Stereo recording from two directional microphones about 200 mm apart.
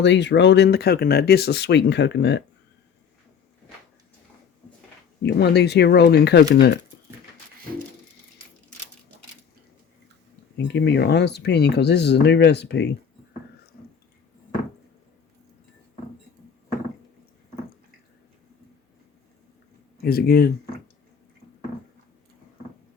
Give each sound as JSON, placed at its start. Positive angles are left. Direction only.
{"t": 0.0, "sound": "speech", "side_deg": 60}
{"t": 5.2, "sound": "speech", "side_deg": 55}
{"t": 10.8, "sound": "speech", "side_deg": 55}
{"t": 20.0, "sound": "speech", "side_deg": 50}